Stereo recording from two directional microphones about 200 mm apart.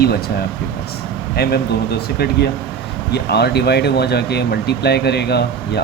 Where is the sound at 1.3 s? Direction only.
50° left (ahead or behind).